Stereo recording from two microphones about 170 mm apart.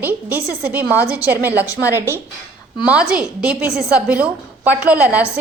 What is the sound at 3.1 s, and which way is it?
A woman's voice, 5° right (ahead or behind).